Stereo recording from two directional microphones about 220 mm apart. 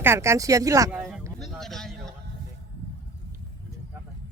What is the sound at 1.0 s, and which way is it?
Speech, centre (ahead or behind).